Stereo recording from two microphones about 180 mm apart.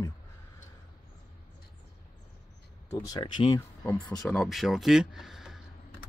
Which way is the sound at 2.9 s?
20° left (ahead or behind).